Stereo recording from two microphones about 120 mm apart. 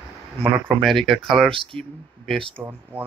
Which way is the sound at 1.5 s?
45° right (ahead or behind).